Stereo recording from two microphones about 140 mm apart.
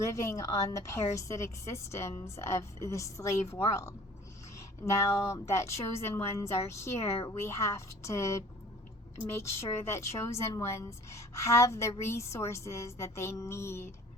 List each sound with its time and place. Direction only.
0.0 s a woman's voice: 20° left (ahead or behind)